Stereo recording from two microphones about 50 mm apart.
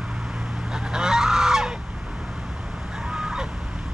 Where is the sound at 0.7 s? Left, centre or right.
Centre.